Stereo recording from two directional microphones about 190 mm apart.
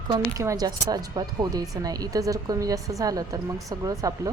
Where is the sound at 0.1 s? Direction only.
20° right (ahead or behind).